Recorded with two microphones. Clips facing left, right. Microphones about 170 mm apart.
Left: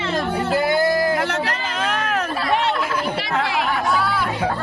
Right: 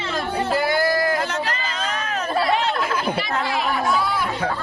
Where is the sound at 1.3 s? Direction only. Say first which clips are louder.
Left 2 dB; 65° left (ahead or behind).